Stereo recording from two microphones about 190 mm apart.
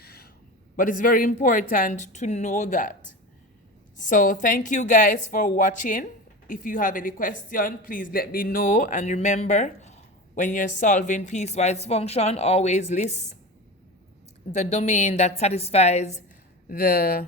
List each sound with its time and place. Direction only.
0.0 s a sound: 55° left (ahead or behind)
0.8 s a woman's voice: 45° left (ahead or behind)
3.9 s a woman's voice: 45° left (ahead or behind)
14.5 s speech: 35° left (ahead or behind)
16.6 s a woman's voice: 50° left (ahead or behind)